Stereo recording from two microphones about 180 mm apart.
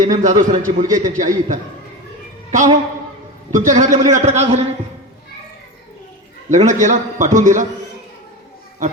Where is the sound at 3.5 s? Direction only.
45° right (ahead or behind).